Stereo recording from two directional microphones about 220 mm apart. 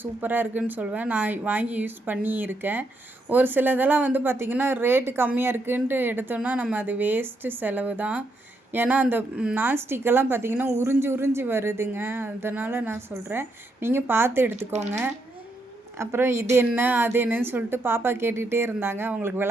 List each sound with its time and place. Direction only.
0.0 s speech: 10° right (ahead or behind)
14.7 s speech: 30° right (ahead or behind)
16.0 s speech: 10° right (ahead or behind)